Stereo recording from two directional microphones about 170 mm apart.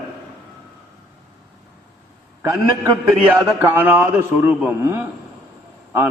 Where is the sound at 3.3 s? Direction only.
10° right (ahead or behind).